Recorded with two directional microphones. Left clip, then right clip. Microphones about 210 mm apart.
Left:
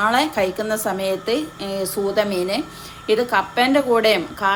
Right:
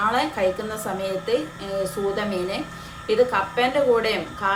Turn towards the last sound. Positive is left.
turn(degrees=50)  # may be behind; listen again after turning